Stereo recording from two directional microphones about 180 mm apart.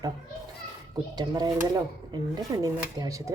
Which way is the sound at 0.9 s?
25° right (ahead or behind).